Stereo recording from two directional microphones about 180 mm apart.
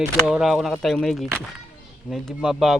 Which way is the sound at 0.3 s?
5° right (ahead or behind).